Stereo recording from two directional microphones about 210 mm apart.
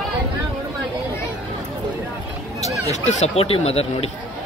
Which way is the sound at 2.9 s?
35° left (ahead or behind).